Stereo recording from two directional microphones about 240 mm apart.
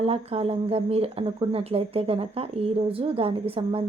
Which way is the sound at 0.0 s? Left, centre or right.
Right.